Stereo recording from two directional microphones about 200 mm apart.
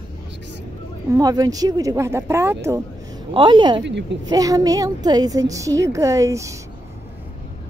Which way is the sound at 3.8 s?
60° right (ahead or behind).